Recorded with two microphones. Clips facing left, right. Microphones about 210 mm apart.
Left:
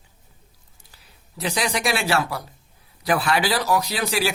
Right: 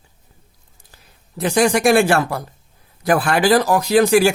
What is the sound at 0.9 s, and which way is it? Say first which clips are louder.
Speech: right 6 dB; 45° right (ahead or behind).